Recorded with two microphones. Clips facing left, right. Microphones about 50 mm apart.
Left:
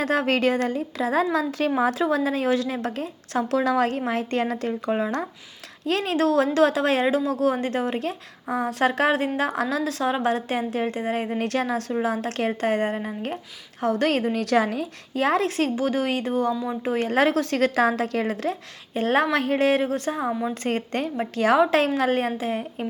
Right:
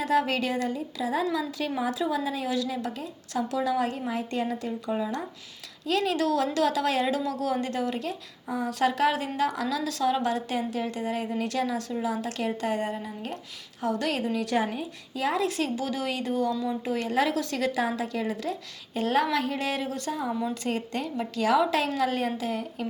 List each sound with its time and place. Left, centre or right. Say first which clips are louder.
0.0 s a woman's voice: left 4 dB; left
5.8 s a woman's voice: left 3 dB; left
14.4 s a woman's voice: left 5 dB; left
15.1 s a woman's voice: left 5 dB; left